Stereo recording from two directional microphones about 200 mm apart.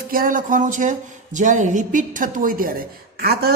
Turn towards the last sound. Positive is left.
turn(degrees=-50)  # may be behind; listen again after turning